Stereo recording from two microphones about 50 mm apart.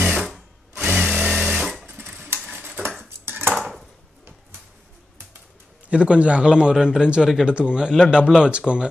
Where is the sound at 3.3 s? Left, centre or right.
Right.